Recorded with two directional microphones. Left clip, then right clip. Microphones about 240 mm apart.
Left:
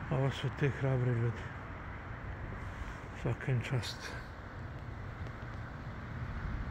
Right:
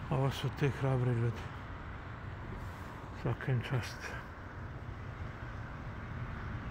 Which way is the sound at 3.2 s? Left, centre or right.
Centre.